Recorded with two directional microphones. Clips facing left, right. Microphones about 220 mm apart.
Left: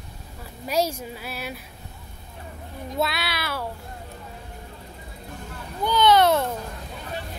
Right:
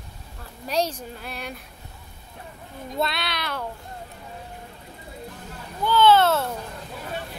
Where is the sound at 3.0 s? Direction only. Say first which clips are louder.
Left 1 dB; 5° left (ahead or behind).